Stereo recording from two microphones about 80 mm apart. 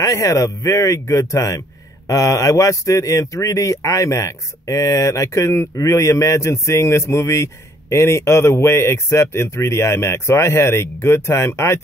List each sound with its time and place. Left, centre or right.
0.0 s a man's voice: left